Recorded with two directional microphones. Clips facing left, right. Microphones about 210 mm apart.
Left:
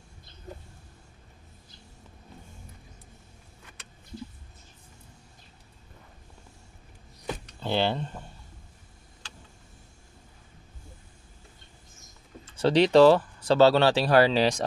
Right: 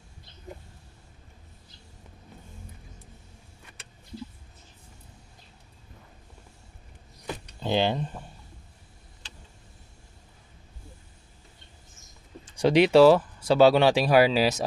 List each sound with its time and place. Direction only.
7.6 s speech: 15° right (ahead or behind)
12.5 s speech: 10° right (ahead or behind)